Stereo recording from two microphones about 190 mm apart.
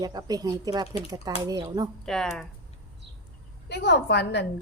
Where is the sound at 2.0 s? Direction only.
Centre (ahead or behind).